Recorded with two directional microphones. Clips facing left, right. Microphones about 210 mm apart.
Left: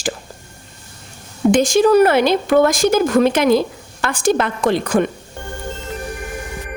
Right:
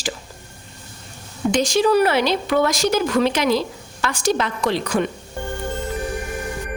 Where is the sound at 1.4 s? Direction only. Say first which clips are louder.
Left 5 dB; 50° left (ahead or behind).